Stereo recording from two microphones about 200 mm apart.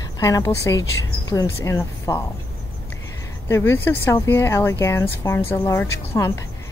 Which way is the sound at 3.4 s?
15° left (ahead or behind).